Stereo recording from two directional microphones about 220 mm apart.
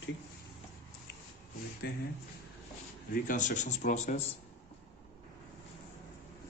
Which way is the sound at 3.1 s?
35° left (ahead or behind).